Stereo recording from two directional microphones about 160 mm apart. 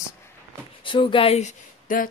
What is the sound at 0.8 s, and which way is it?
Speech, 30° left (ahead or behind).